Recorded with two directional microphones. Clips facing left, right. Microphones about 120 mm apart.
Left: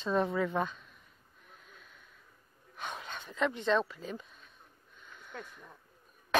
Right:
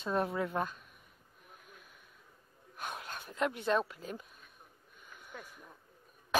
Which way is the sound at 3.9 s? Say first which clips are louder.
Left 2 dB; 5° right (ahead or behind).